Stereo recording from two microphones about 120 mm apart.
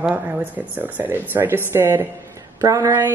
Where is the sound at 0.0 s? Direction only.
15° right (ahead or behind).